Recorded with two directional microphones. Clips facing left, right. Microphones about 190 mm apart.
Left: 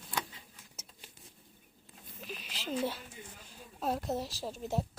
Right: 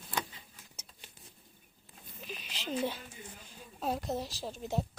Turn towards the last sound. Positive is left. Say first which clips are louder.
# even
turn(degrees=5)  # may be behind; listen again after turning